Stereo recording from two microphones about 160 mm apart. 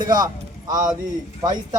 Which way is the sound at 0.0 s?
25° right (ahead or behind).